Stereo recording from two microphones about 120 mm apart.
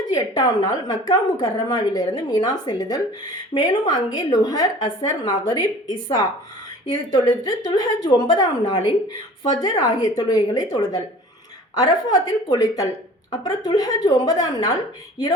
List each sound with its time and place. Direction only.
0.1 s a woman's voice: 30° left (ahead or behind)
7.1 s a woman's voice: 30° left (ahead or behind)